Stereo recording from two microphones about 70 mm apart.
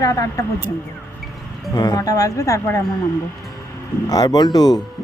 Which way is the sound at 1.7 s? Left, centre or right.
Left.